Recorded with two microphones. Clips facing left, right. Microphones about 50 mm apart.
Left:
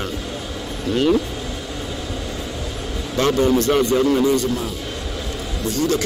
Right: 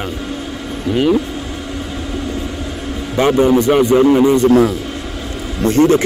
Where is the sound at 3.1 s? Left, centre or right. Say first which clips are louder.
Right 5 dB; right.